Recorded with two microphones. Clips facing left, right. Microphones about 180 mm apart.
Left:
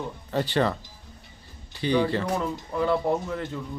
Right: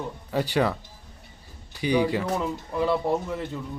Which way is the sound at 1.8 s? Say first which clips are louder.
Even; 10° right (ahead or behind).